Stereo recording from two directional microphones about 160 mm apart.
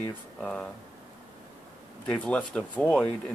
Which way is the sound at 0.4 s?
5° left (ahead or behind).